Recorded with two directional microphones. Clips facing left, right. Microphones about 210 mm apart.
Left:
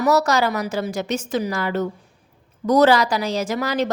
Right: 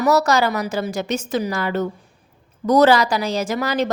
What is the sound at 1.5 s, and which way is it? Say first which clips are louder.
A woman's voice: right 1 dB; 30° right (ahead or behind).